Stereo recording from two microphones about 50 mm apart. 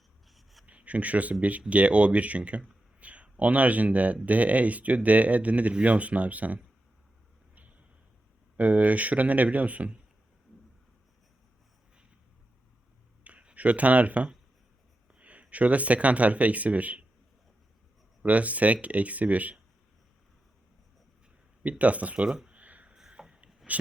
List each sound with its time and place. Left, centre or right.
0.3 s writing: centre
0.6 s speech: right
7.5 s a sound: right
8.5 s speech: right
13.2 s speech: right
18.2 s speech: right
21.6 s speech: right
22.4 s a sound: right
23.0 s a sound: centre
23.6 s speech: centre